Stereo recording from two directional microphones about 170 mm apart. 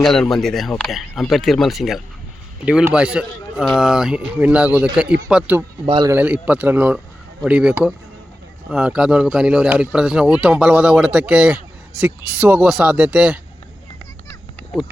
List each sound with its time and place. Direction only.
0.0 s a man's voice: centre (ahead or behind)
5.8 s a man's voice: 30° right (ahead or behind)
6.1 s a man's voice: 10° right (ahead or behind)